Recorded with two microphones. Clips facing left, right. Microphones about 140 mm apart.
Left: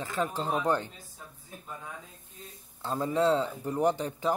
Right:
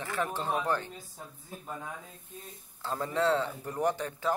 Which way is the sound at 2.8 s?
20° left (ahead or behind).